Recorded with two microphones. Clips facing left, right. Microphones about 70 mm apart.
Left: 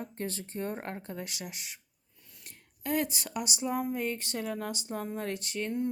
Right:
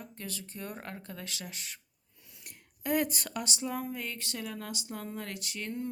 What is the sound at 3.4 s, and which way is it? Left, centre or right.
Speech, left.